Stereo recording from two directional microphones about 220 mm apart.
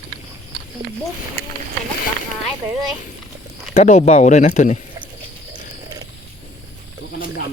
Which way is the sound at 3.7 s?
30° left (ahead or behind).